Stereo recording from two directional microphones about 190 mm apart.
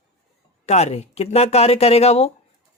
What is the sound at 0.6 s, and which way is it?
Speech, 35° left (ahead or behind).